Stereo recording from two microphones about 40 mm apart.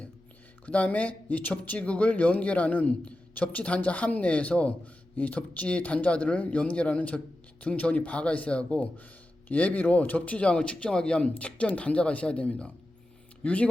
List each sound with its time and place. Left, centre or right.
0.6 s speech: left
10.2 s speech: left